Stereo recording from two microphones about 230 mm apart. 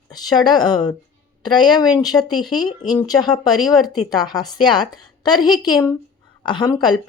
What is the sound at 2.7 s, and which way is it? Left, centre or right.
Speech, centre.